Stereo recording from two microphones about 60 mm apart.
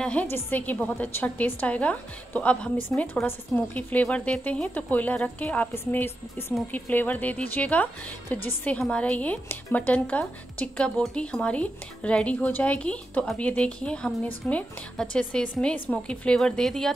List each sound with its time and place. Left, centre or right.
0.0 s a woman's voice: left
8.7 s speech: centre
9.0 s a woman's voice: left
10.8 s speech: centre
11.4 s a woman's voice: left
16.3 s speech: centre